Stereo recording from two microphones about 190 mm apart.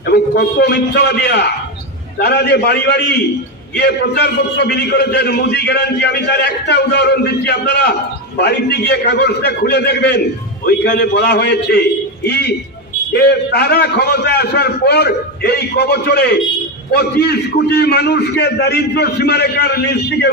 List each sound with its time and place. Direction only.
0.0 s a man's voice: 55° left (ahead or behind)